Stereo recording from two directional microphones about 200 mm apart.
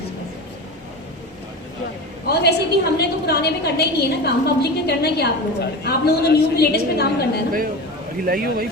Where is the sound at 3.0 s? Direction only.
55° left (ahead or behind).